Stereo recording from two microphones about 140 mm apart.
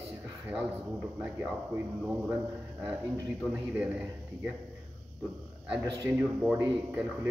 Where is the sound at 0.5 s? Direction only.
10° right (ahead or behind).